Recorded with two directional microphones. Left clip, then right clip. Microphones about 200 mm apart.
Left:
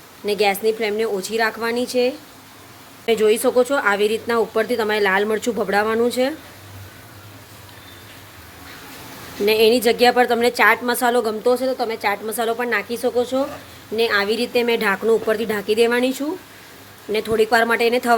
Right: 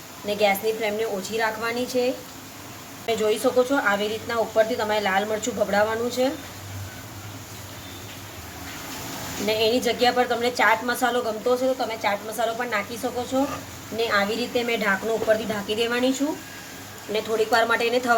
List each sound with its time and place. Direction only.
0.3 s a woman's voice: 50° left (ahead or behind)
3.1 s a woman's voice: 50° left (ahead or behind)
9.5 s a woman's voice: 55° left (ahead or behind)
17.1 s a woman's voice: 50° left (ahead or behind)